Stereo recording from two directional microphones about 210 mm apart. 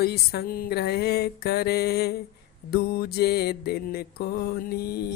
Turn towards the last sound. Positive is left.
turn(degrees=50)  # may be behind; listen again after turning